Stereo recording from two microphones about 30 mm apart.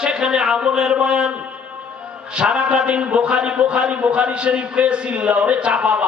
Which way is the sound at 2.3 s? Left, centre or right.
Right.